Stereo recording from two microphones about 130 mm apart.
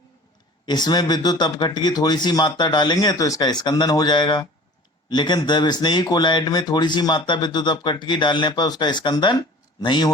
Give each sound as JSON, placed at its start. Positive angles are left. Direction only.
{"t": 0.6, "sound": "speech", "side_deg": 35}